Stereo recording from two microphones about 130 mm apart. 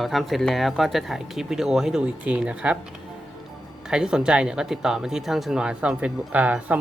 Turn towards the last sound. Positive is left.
turn(degrees=-10)  # may be behind; listen again after turning